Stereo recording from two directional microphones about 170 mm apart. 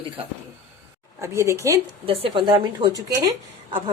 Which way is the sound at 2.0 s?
35° right (ahead or behind).